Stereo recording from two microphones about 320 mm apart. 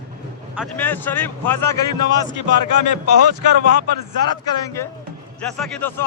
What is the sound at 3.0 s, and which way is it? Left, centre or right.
Speech, right.